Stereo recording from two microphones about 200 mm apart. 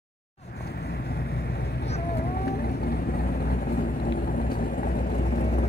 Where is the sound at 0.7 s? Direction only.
50° left (ahead or behind).